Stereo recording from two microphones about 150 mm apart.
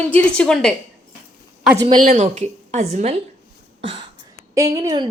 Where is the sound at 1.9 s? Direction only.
65° right (ahead or behind).